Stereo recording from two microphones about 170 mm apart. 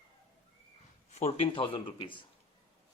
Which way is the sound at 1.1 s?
35° left (ahead or behind).